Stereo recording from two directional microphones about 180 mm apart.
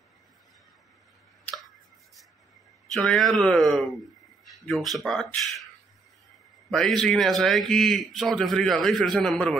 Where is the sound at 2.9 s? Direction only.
Centre (ahead or behind).